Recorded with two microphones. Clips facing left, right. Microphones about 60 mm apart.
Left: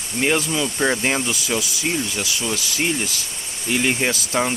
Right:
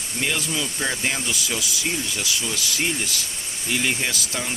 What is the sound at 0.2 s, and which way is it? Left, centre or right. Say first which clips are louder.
Speech: left 6 dB; left.